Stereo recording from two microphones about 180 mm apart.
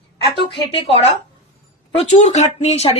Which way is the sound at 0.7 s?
35° left (ahead or behind).